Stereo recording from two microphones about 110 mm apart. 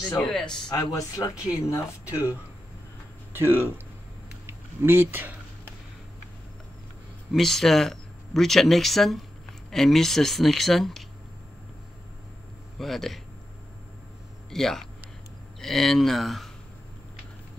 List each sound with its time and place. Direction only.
0.2 s speech: 5° left (ahead or behind)
0.7 s speech: 35° left (ahead or behind)
2.0 s speech: 20° right (ahead or behind)
3.3 s speech: 20° right (ahead or behind)
4.5 s a sound: 20° right (ahead or behind)
7.3 s speech: 5° left (ahead or behind)
12.7 s speech: centre (ahead or behind)
14.5 s speech: 5° left (ahead or behind)